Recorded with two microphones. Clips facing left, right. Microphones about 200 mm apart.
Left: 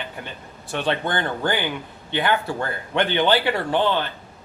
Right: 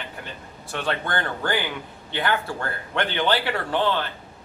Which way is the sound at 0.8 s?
20° left (ahead or behind).